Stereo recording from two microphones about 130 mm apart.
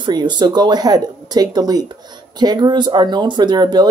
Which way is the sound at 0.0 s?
35° right (ahead or behind).